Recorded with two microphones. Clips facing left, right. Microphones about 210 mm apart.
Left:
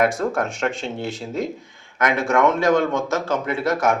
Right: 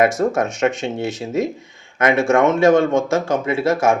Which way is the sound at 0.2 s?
20° right (ahead or behind).